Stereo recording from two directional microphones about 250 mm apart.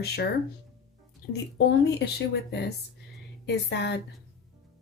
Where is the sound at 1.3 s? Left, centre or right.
Left.